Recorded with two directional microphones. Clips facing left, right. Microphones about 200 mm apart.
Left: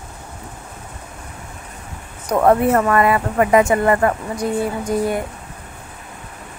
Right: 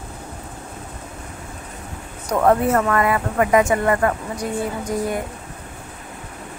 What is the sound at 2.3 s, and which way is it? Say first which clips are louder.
Speech: left 2 dB; 30° left (ahead or behind).